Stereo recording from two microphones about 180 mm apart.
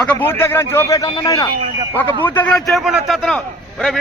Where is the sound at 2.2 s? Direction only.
10° left (ahead or behind).